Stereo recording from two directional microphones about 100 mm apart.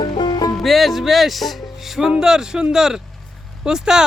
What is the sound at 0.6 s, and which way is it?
Music, centre (ahead or behind).